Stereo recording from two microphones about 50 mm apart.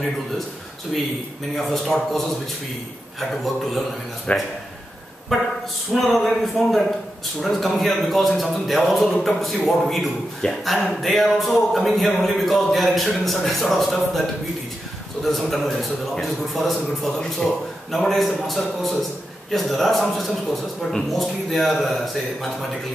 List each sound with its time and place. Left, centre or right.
0.9 s a man's voice: centre
4.3 s speech: left
5.3 s a man's voice: centre
15.2 s a man's voice: centre